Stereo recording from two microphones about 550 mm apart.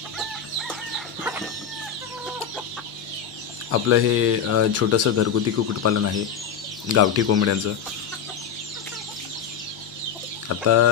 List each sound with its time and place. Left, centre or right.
0.2 s chicken: centre
3.7 s speech: right
10.5 s speech: right